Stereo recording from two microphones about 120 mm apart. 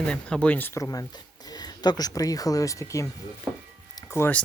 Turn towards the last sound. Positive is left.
turn(degrees=20)  # may be behind; listen again after turning